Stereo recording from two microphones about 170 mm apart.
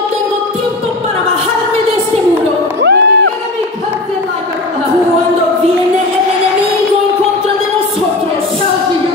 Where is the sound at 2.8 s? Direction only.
85° right.